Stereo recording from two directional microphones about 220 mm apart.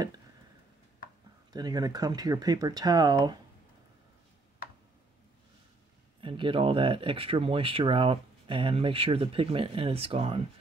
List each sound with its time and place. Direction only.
1.5 s speech: 20° right (ahead or behind)
6.2 s speech: 25° right (ahead or behind)